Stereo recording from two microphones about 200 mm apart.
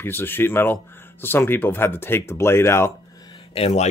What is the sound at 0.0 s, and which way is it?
Speech, 10° left (ahead or behind).